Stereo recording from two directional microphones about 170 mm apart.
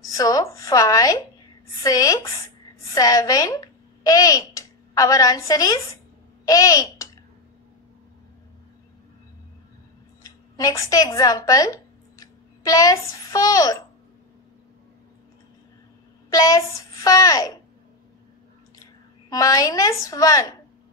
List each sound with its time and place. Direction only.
0.0 s a child's voice: 20° left (ahead or behind)
10.2 s a woman's voice: 20° left (ahead or behind)
16.3 s a child's voice: 20° left (ahead or behind)
18.8 s a woman's voice: 20° left (ahead or behind)